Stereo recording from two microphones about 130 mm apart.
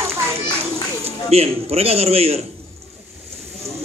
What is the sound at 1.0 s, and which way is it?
A man's voice, 50° right (ahead or behind).